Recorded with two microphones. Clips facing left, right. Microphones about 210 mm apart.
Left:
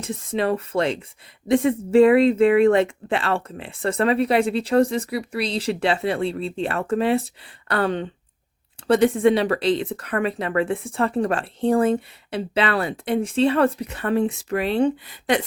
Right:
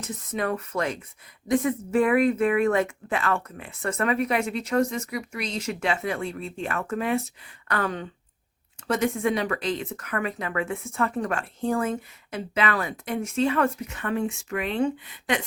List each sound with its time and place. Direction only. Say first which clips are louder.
0.0 s speech: left 5 dB; 30° left (ahead or behind)